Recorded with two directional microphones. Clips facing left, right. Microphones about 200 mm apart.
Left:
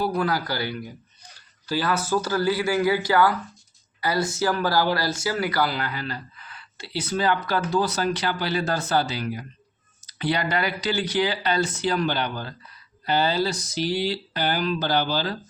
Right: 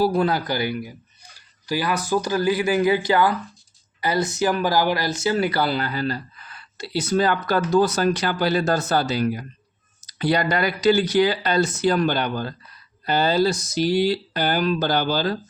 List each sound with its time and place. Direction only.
0.0 s a man's voice: 25° right (ahead or behind); by 15.4 s 45° right (ahead or behind)